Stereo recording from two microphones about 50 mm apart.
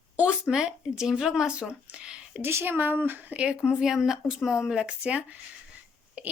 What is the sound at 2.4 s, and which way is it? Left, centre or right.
Speech, right.